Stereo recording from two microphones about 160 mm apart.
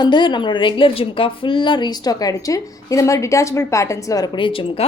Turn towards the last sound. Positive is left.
turn(degrees=35)  # may be behind; listen again after turning